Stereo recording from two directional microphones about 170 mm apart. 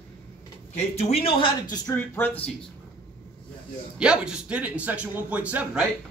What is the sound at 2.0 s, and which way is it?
Speech, 10° left (ahead or behind).